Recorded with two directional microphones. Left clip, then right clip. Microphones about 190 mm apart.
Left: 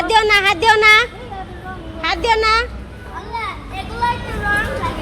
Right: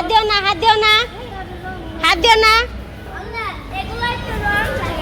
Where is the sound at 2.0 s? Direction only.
5° right (ahead or behind).